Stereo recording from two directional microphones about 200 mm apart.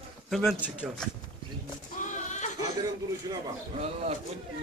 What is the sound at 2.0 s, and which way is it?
Goat, 40° left (ahead or behind).